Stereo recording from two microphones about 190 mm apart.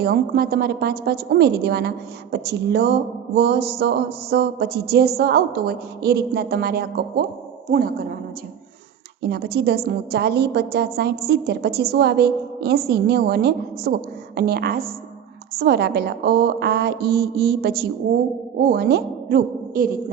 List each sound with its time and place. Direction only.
0.0 s a woman's voice: 55° right (ahead or behind)
9.3 s a woman's voice: 55° right (ahead or behind)